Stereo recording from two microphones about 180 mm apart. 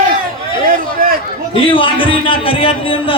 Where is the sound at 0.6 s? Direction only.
50° right (ahead or behind).